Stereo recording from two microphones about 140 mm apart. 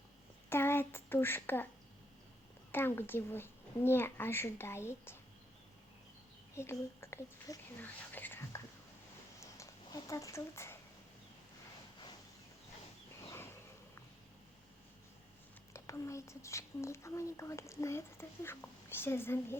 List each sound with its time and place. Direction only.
0.5 s speech: 15° left (ahead or behind)
2.7 s a child's voice: 15° left (ahead or behind)
6.6 s a woman's voice: 20° left (ahead or behind)
7.8 s whispering: 15° left (ahead or behind)
9.4 s a sound: 20° left (ahead or behind)
15.7 s a woman's voice: 20° left (ahead or behind)